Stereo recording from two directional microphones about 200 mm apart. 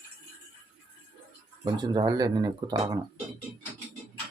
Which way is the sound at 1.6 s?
20° right (ahead or behind).